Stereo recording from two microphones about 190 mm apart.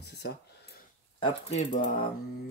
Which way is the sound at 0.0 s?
60° left (ahead or behind).